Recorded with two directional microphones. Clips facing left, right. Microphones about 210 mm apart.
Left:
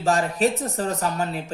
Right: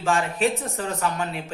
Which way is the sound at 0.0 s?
40° left (ahead or behind).